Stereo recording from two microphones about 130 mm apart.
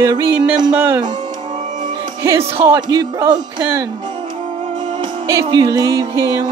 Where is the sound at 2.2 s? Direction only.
20° right (ahead or behind).